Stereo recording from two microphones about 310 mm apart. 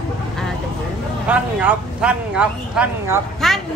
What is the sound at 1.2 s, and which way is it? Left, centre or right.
Speech, centre.